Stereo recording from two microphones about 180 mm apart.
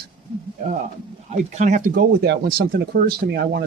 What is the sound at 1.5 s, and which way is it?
Speech, 40° right (ahead or behind).